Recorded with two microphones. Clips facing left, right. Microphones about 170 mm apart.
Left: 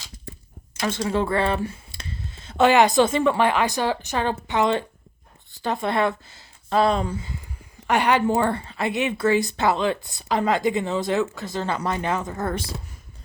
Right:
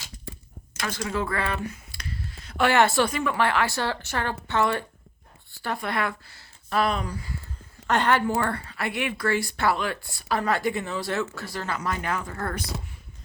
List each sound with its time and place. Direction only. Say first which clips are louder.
0.8 s speech: left 5 dB; 25° left (ahead or behind)
7.9 s a woman's voice: left 3 dB; 10° left (ahead or behind)